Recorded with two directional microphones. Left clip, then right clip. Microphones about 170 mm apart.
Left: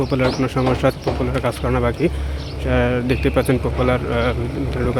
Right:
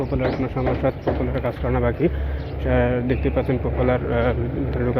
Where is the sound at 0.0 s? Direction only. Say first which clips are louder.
Left 4 dB; 55° left (ahead or behind).